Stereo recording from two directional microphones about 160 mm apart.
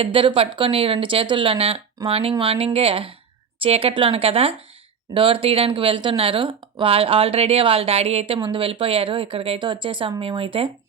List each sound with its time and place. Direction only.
0.0 s speech: 35° right (ahead or behind)